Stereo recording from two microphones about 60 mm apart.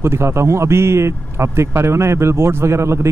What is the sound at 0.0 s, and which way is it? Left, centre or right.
A man's voice, right.